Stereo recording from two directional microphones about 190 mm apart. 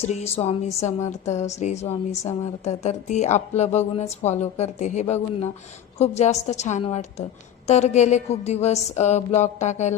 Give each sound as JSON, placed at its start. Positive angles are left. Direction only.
{"t": 0.0, "sound": "a woman's voice", "side_deg": 35}